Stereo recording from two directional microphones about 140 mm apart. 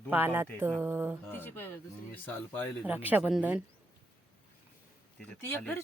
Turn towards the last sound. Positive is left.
turn(degrees=10)  # may be behind; listen again after turning